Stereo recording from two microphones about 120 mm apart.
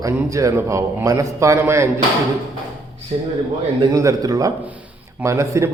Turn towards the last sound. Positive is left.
turn(degrees=-25)  # may be behind; listen again after turning